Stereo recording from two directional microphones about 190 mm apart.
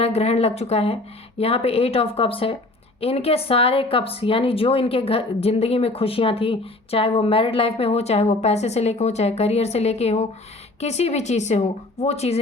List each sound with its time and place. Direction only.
0.0 s speech: 35° left (ahead or behind)